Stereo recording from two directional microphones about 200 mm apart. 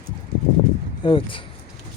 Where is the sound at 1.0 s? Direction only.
25° left (ahead or behind).